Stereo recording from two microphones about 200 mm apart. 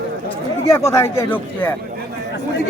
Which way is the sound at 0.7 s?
15° left (ahead or behind).